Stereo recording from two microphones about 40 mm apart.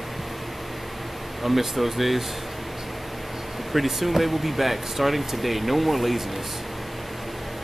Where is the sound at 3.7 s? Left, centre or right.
Centre.